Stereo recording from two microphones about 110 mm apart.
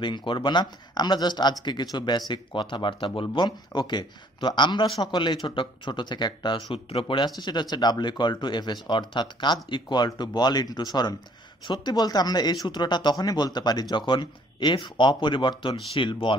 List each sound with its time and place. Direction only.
0.0 s speech: 50° left (ahead or behind)
7.3 s speech: 40° left (ahead or behind)